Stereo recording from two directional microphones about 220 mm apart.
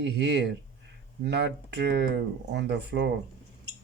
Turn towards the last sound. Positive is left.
turn(degrees=-50)  # may be behind; listen again after turning